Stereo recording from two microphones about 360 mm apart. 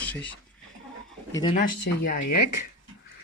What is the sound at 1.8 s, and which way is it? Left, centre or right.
Speech, left.